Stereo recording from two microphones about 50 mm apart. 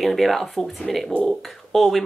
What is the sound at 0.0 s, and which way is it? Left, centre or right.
Speech, centre.